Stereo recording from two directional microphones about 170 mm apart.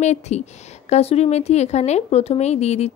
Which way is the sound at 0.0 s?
40° left (ahead or behind).